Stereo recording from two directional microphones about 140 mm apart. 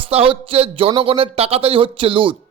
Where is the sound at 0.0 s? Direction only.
40° right (ahead or behind).